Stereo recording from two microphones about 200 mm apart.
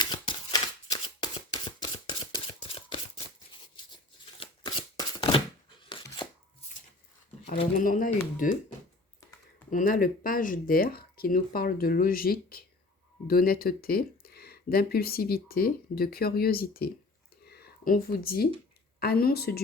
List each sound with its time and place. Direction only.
0.0 s shuffling cards: 20° left (ahead or behind)
7.8 s speech: 45° left (ahead or behind)
9.6 s speech: 40° left (ahead or behind)
17.4 s a sound: 50° left (ahead or behind)
18.9 s speech: 50° left (ahead or behind)